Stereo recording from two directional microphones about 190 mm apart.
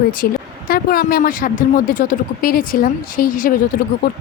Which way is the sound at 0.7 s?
50° left (ahead or behind).